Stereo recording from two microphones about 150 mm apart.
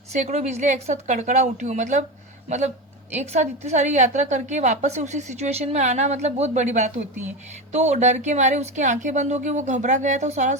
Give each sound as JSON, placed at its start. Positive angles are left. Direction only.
{"t": 0.1, "sound": "a woman's voice", "side_deg": -50}
{"t": 3.1, "sound": "a woman's voice", "side_deg": -50}